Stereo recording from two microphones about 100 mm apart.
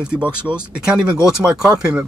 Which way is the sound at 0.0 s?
10° right (ahead or behind).